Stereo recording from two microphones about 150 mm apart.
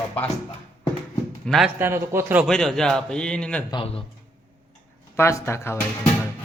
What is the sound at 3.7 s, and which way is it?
Speech, 35° left (ahead or behind).